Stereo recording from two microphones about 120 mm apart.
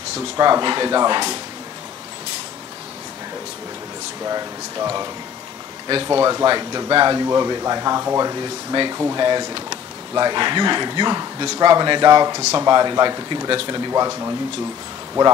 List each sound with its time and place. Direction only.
0.4 s speech: 35° right (ahead or behind)
4.2 s speech: 30° right (ahead or behind)
6.0 s speech: 30° right (ahead or behind)